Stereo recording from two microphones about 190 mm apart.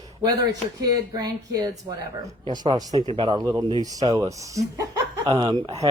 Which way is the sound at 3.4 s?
15° right (ahead or behind).